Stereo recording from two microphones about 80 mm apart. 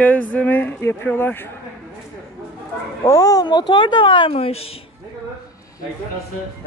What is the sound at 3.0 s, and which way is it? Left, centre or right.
Speech, left.